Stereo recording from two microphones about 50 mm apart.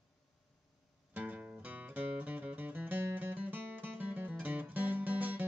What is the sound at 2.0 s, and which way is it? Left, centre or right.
Music, right.